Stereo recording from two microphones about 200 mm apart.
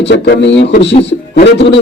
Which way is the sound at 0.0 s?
60° left (ahead or behind).